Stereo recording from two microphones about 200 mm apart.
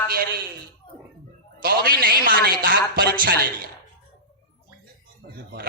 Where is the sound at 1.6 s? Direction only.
45° right (ahead or behind).